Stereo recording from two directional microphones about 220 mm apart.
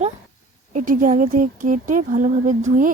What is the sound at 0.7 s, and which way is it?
Speech, 35° right (ahead or behind).